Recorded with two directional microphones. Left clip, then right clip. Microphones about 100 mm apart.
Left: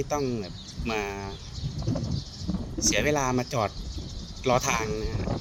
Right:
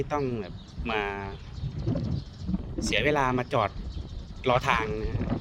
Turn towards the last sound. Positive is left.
turn(degrees=-5)  # may be behind; listen again after turning